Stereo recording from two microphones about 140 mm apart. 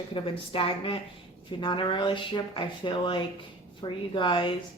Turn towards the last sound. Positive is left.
turn(degrees=35)  # may be behind; listen again after turning